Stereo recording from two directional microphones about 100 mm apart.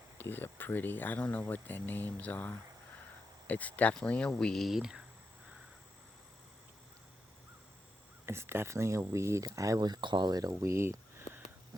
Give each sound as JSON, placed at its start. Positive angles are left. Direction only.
{"t": 0.2, "sound": "speech", "side_deg": 20}
{"t": 8.3, "sound": "speech", "side_deg": -25}
{"t": 10.5, "sound": "a sound", "side_deg": -30}